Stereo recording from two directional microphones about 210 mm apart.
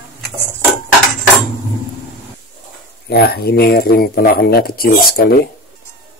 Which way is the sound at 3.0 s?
50° left (ahead or behind).